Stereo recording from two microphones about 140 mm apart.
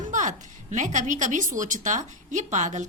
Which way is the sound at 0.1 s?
65° right (ahead or behind).